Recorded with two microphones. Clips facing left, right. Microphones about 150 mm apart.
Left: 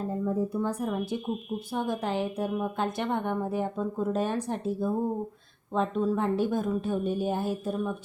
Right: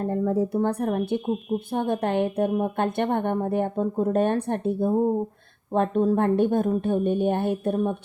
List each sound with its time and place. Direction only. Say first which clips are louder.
0.0 s speech: right 5 dB; 70° right (ahead or behind)